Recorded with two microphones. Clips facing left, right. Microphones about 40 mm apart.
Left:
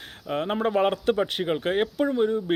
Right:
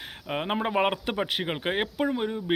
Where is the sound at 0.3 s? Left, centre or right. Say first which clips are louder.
Left 3 dB; right.